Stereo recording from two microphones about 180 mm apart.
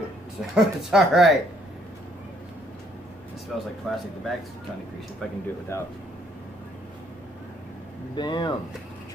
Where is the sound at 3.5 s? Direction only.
Centre (ahead or behind).